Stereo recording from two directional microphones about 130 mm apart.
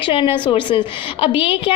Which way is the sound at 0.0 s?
40° left (ahead or behind).